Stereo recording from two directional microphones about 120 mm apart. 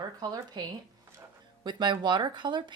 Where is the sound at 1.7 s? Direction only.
40° right (ahead or behind).